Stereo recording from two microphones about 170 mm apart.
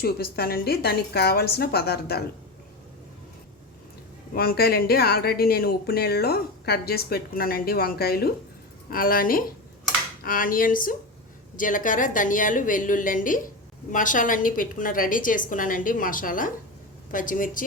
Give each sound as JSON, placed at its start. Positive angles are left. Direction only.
{"t": 0.0, "sound": "a woman's voice", "side_deg": 65}
{"t": 4.4, "sound": "a woman's voice", "side_deg": 65}